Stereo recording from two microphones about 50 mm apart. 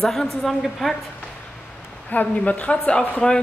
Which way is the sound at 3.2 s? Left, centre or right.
Centre.